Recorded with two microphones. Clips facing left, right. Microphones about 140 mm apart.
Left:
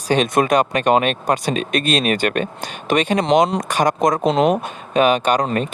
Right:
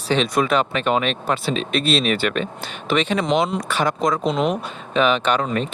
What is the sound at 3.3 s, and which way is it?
Speech, 15° left (ahead or behind).